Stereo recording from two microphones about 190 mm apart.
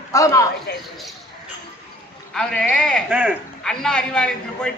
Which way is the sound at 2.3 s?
5° left (ahead or behind).